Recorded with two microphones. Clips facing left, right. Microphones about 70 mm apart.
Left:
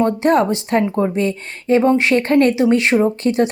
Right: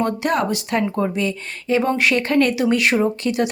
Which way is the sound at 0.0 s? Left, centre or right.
Left.